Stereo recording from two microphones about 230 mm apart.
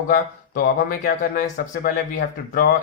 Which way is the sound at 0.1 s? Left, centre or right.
Left.